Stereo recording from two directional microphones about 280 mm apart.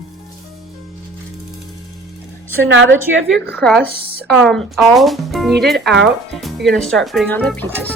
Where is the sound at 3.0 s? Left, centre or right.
Centre.